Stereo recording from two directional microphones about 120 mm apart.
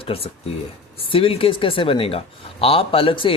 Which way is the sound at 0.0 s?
55° left (ahead or behind).